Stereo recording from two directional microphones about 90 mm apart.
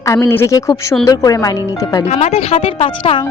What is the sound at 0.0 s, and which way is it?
Speech, 35° left (ahead or behind).